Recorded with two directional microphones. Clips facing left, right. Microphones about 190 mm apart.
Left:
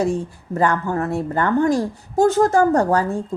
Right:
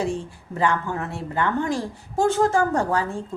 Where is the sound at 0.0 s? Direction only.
45° left (ahead or behind).